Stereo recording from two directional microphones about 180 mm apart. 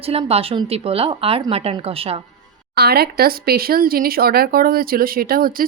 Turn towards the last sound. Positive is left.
turn(degrees=-55)  # may be behind; listen again after turning